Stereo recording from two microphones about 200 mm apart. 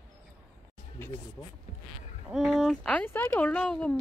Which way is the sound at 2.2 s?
Centre (ahead or behind).